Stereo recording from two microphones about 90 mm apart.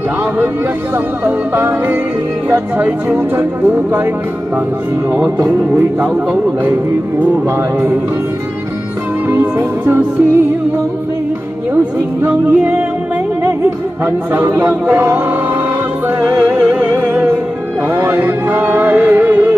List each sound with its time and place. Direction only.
0.9 s speech: 25° right (ahead or behind)
5.1 s music: 35° right (ahead or behind)
9.3 s speech: 20° right (ahead or behind)
11.7 s speech: 20° right (ahead or behind)
14.0 s speech: 30° right (ahead or behind)
16.3 s music: 20° right (ahead or behind)